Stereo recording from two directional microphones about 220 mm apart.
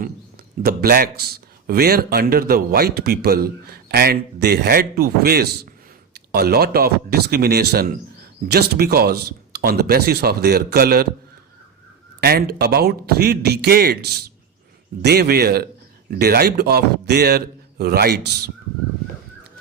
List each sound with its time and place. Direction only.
0.6 s speech: 45° right (ahead or behind)
12.2 s speech: 45° right (ahead or behind)